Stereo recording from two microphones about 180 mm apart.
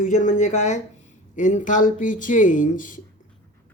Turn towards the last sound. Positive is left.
turn(degrees=45)  # may be behind; listen again after turning